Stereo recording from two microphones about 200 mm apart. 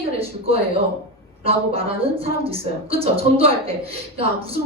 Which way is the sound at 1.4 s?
30° right (ahead or behind).